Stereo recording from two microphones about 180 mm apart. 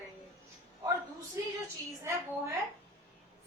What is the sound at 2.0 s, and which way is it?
Speech, 15° right (ahead or behind).